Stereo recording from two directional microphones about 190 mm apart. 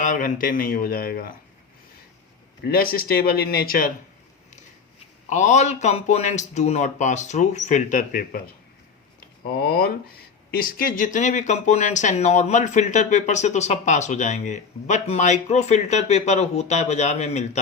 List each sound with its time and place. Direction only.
0.0 s speech: 45° left (ahead or behind)
2.6 s speech: 50° left (ahead or behind)
5.3 s speech: 40° left (ahead or behind)
9.5 s speech: 55° left (ahead or behind); by 17.6 s 35° left (ahead or behind)